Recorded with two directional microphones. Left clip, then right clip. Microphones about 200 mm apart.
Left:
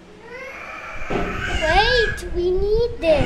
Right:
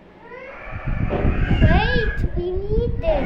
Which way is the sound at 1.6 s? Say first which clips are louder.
Left 6 dB; 55° left (ahead or behind).